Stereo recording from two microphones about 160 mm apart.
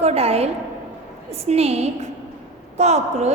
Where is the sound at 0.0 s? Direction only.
40° right (ahead or behind).